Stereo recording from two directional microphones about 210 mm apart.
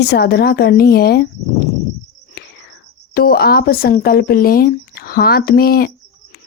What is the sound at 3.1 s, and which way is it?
Speech, 45° left (ahead or behind).